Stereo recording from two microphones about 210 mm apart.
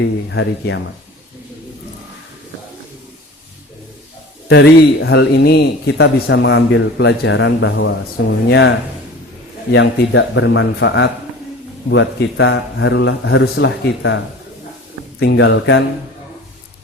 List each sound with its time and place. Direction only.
0.0 s a man's voice: 60° left (ahead or behind)
4.4 s a man's voice: 50° left (ahead or behind)
9.7 s a man's voice: 60° left (ahead or behind)
15.2 s a man's voice: 55° left (ahead or behind)